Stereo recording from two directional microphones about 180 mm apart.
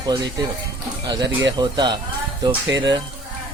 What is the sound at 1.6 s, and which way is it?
Speech, 25° right (ahead or behind).